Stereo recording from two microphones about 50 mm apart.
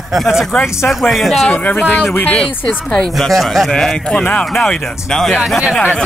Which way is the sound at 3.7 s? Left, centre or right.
Centre.